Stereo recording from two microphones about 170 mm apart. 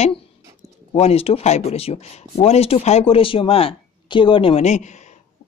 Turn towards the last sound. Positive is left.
turn(degrees=45)  # may be behind; listen again after turning